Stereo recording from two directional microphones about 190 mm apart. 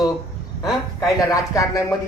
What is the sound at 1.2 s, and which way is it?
Speech, 15° left (ahead or behind).